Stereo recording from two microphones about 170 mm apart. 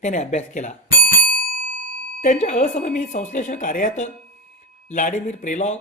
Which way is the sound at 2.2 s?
45° left (ahead or behind).